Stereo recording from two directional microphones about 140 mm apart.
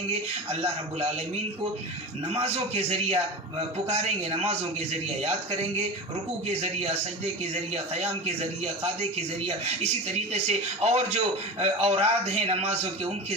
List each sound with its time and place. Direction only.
2.3 s speech: 50° right (ahead or behind)
6.5 s speech: 50° right (ahead or behind)
10.8 s speech: 50° right (ahead or behind)